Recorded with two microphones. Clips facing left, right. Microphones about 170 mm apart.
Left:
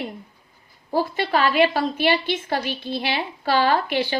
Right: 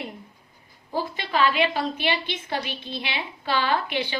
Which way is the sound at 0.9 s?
45° left (ahead or behind).